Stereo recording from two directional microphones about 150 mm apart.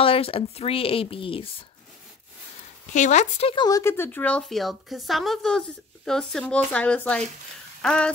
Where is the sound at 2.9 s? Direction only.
55° left (ahead or behind).